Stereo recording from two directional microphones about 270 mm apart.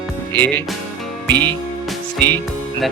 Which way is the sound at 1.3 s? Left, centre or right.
Centre.